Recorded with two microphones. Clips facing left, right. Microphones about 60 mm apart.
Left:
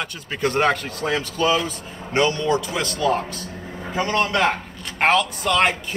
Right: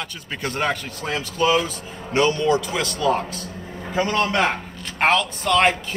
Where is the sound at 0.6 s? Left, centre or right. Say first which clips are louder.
Left 3 dB; left.